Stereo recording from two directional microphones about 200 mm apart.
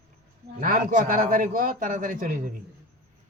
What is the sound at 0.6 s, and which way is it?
A man's voice, 45° right (ahead or behind).